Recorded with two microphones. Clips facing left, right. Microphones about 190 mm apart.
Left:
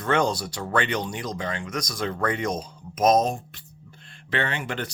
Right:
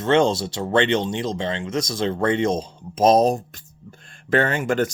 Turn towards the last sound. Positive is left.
turn(degrees=-45)  # may be behind; listen again after turning